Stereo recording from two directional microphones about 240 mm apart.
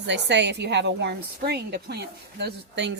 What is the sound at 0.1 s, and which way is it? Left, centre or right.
Speech, right.